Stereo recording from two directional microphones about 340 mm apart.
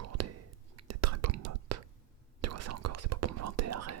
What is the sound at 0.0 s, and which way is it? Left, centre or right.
Whispering, right.